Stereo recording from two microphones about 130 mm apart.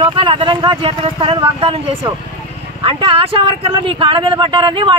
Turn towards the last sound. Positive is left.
turn(degrees=-40)  # may be behind; listen again after turning